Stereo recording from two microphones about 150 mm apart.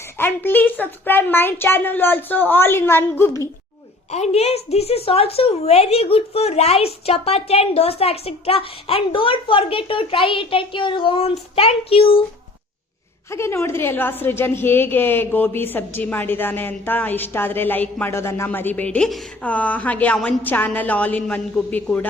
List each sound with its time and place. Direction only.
0.2 s a woman's voice: 15° left (ahead or behind)
4.1 s a woman's voice: 45° left (ahead or behind)
13.3 s a woman's voice: 20° left (ahead or behind)